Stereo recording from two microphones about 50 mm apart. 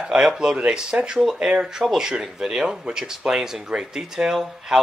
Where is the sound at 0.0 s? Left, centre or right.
Centre.